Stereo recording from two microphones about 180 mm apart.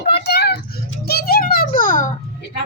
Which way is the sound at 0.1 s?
65° left (ahead or behind).